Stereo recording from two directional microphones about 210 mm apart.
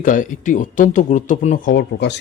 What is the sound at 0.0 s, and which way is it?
Speech, 40° left (ahead or behind).